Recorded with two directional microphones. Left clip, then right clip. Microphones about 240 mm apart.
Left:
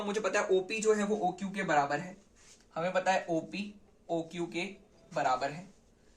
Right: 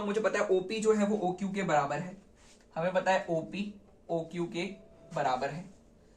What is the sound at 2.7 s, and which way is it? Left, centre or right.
Speech, left.